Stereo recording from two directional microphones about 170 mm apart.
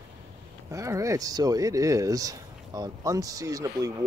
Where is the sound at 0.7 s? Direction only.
20° right (ahead or behind).